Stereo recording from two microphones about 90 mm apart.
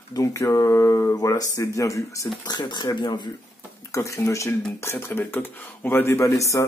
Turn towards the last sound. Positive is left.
turn(degrees=35)  # may be behind; listen again after turning